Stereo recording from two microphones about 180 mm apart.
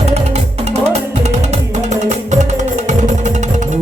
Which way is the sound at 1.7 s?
40° right (ahead or behind).